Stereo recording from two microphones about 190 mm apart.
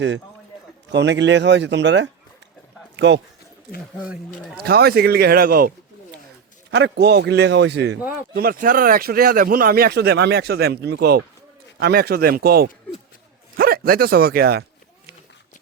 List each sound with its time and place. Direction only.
0.9 s speech: 65° right (ahead or behind)
4.0 s speech: 5° right (ahead or behind)
4.5 s a man's voice: 55° right (ahead or behind)
6.7 s a man's voice: 65° right (ahead or behind)
8.3 s a man's voice: 55° right (ahead or behind)